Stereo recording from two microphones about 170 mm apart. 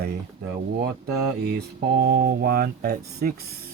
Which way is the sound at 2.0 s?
65° right (ahead or behind).